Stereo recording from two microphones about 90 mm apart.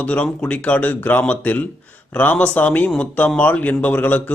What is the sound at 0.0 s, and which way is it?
A man's voice, 15° left (ahead or behind).